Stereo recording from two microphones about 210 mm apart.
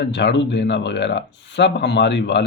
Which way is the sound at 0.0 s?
55° left (ahead or behind).